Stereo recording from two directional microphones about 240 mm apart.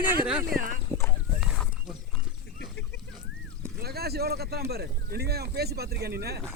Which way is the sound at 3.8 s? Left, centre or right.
Right.